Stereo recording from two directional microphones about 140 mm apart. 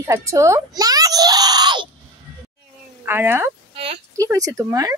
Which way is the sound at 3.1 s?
15° right (ahead or behind).